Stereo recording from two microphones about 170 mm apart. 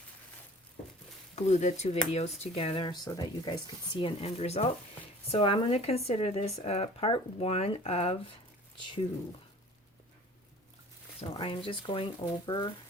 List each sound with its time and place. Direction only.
1.4 s speech: 40° left (ahead or behind)
11.2 s speech: 30° left (ahead or behind)